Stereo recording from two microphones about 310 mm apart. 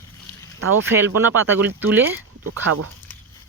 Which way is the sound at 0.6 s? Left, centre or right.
Right.